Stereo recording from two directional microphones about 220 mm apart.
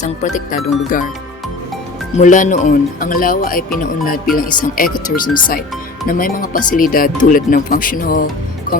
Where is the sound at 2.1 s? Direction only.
35° left (ahead or behind).